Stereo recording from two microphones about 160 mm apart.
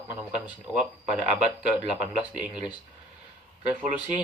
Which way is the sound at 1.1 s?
45° right (ahead or behind).